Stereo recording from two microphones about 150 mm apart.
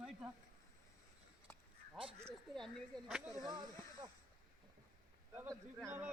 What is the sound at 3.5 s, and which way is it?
Speech, 30° right (ahead or behind).